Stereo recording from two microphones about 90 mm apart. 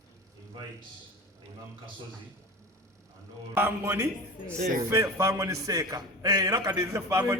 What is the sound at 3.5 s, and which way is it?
A man's voice, 25° right (ahead or behind).